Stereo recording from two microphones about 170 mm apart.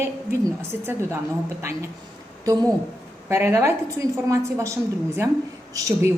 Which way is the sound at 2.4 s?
20° right (ahead or behind).